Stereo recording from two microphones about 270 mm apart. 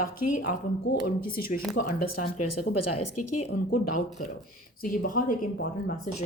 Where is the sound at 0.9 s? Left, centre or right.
Left.